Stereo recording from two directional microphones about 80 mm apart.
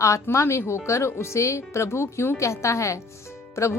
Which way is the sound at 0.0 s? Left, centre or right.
Left.